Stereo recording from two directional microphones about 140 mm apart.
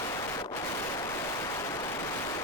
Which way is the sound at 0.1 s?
25° left (ahead or behind).